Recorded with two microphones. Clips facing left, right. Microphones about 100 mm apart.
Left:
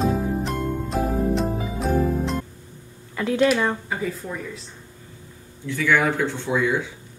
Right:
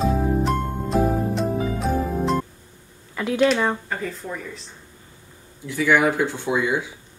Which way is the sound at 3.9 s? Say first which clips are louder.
Left 1 dB; 5° left (ahead or behind).